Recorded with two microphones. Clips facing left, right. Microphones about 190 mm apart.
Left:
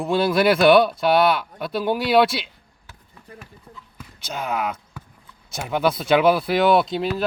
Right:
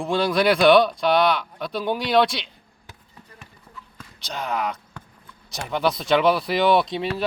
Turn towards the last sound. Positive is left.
turn(degrees=0)  # may be behind; listen again after turning